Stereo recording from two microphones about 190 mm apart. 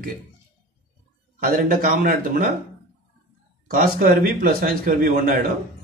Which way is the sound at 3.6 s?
50° right (ahead or behind).